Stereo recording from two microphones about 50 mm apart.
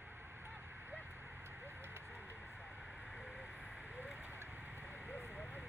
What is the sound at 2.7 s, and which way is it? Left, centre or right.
Vehicle, right.